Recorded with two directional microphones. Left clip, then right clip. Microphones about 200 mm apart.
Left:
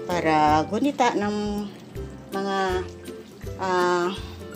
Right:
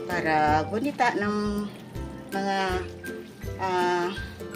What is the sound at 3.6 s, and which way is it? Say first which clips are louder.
Speech: left 3 dB; 35° left (ahead or behind).